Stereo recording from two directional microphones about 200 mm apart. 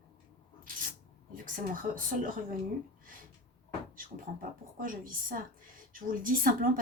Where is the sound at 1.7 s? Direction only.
45° right (ahead or behind).